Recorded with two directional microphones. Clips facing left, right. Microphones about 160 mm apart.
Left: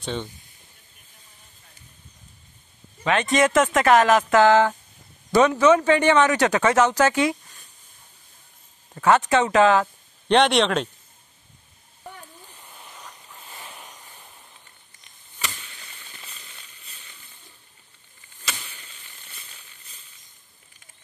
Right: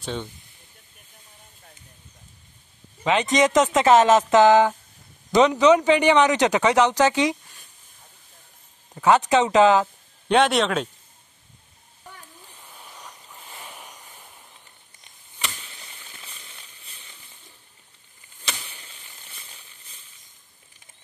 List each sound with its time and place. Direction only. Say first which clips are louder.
0.0 s speech: left 1 dB; 5° right (ahead or behind)
3.0 s speech: even; 20° right (ahead or behind)
8.9 s speech: right 1 dB; 15° right (ahead or behind)
10.2 s a man's voice: left 1 dB; 5° right (ahead or behind)
12.5 s vehicle: right 2 dB; centre (ahead or behind)